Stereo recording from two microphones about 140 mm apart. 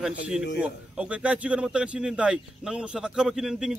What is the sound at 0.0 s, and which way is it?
A man's voice, 5° right (ahead or behind).